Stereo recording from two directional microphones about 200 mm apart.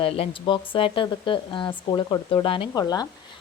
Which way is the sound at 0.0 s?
25° left (ahead or behind).